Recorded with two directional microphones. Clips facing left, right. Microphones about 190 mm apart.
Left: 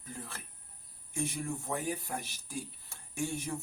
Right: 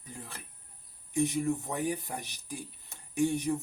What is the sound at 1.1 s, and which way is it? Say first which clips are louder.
Speech: right 7 dB; 20° right (ahead or behind).